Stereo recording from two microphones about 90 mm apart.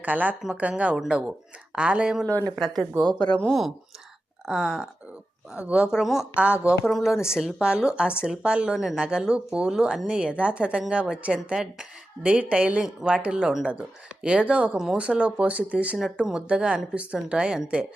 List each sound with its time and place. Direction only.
0.0 s a woman's voice: 20° right (ahead or behind)
2.2 s speech: 20° left (ahead or behind)
2.6 s speech: centre (ahead or behind)
4.4 s speech: 5° right (ahead or behind)
5.5 s a woman's voice: 15° right (ahead or behind)
6.8 s a woman's voice: 5° right (ahead or behind)